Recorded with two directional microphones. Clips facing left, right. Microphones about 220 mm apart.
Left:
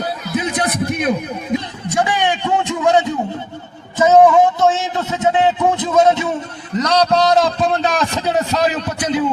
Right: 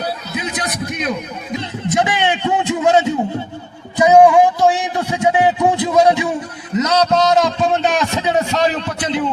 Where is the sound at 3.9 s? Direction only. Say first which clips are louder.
Right 1 dB; 15° right (ahead or behind).